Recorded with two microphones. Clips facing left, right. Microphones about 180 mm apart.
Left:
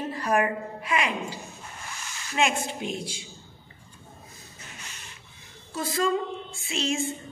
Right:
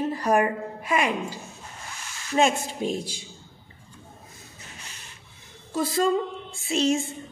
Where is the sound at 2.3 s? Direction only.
35° right (ahead or behind).